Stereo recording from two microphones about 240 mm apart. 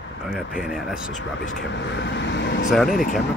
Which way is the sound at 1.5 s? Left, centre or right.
Left.